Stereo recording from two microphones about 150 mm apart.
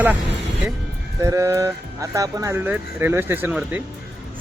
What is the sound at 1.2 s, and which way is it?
Speech, 20° right (ahead or behind).